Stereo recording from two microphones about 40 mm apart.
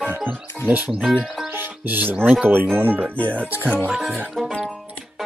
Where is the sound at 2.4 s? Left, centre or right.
Right.